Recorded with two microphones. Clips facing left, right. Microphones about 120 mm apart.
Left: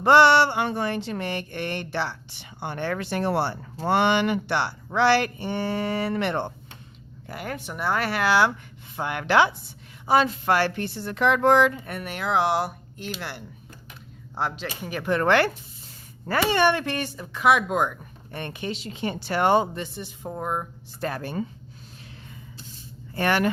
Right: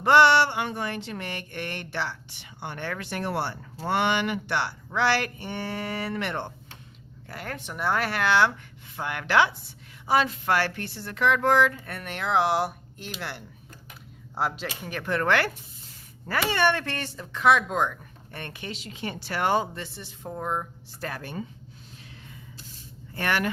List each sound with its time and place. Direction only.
0.0 s speech: 30° left (ahead or behind)
7.3 s speech: 10° left (ahead or behind)
9.0 s speech: 25° left (ahead or behind); by 15.1 s 5° left (ahead or behind)
15.1 s speech: 25° left (ahead or behind)
16.6 s speech: 15° left (ahead or behind)
21.0 s speech: 35° left (ahead or behind)
23.1 s speech: 30° left (ahead or behind)